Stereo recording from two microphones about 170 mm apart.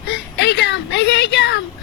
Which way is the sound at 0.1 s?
90° left.